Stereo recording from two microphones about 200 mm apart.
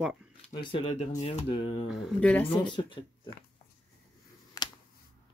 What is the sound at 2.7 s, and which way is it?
Speech, 25° left (ahead or behind).